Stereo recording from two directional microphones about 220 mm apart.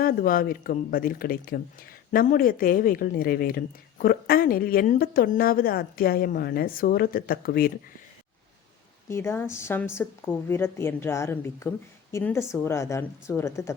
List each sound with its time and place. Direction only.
0.0 s a woman's voice: 40° left (ahead or behind)
9.0 s a woman's voice: 10° left (ahead or behind)